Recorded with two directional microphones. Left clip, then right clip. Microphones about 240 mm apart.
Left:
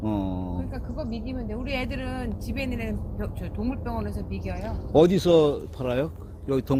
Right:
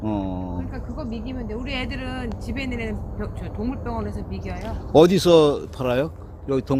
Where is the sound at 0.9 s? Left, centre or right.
Centre.